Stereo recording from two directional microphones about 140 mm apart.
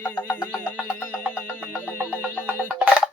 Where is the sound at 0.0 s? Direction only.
15° left (ahead or behind).